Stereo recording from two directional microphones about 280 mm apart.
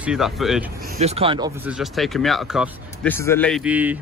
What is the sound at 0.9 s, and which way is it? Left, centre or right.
Speech, right.